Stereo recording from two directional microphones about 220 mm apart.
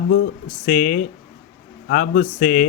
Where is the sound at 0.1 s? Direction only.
35° left (ahead or behind).